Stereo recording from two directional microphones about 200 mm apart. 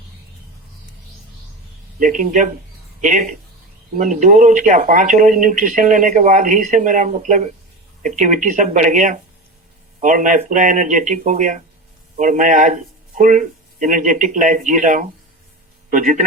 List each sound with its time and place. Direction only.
2.0 s speech: 40° right (ahead or behind)